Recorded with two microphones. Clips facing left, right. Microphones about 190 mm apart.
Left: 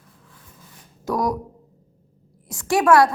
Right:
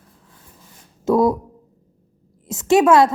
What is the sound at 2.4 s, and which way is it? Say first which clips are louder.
Speech: right 5 dB; 20° right (ahead or behind).